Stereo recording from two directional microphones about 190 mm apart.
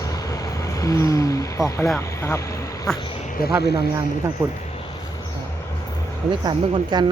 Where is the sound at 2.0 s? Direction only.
15° left (ahead or behind).